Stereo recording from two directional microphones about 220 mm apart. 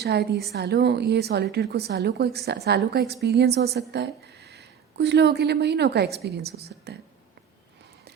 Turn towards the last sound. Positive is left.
turn(degrees=-45)  # may be behind; listen again after turning